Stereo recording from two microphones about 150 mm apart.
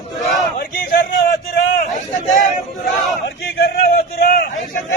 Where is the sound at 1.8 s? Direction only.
60° left (ahead or behind).